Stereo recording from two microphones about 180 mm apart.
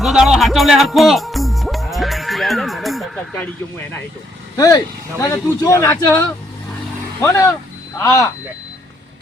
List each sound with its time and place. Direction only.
0.0 s music: centre (ahead or behind)
4.5 s speech: 20° left (ahead or behind)